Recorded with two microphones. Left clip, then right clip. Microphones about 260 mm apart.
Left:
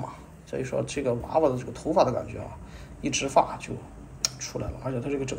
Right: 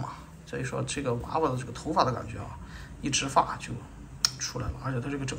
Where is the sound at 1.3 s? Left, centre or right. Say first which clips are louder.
Left 6 dB; centre.